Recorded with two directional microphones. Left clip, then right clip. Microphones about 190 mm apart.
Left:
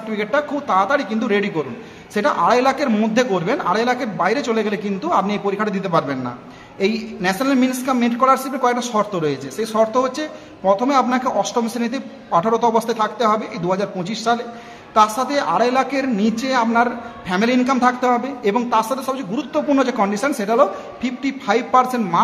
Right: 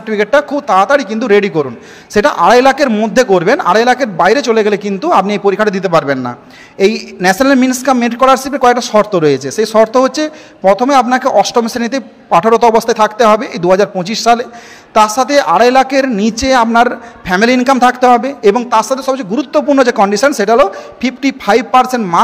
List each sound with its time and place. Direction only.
0.1 s a man's voice: 40° right (ahead or behind)